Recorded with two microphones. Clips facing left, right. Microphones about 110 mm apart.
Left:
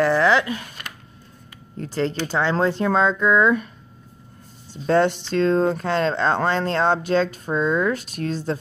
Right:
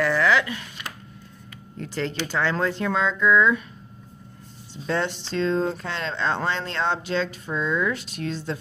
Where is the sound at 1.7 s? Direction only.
35° left (ahead or behind).